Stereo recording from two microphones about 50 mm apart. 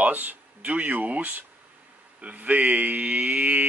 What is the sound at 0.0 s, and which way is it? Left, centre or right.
Speech, right.